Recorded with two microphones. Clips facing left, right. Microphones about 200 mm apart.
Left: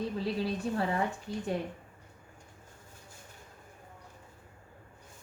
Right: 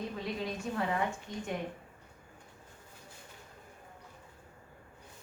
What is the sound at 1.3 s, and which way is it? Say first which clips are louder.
Speech: left 4 dB; 30° left (ahead or behind).